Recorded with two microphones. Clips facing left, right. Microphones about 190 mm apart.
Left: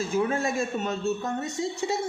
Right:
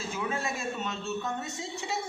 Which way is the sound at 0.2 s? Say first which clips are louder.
Left 7 dB; 45° left (ahead or behind).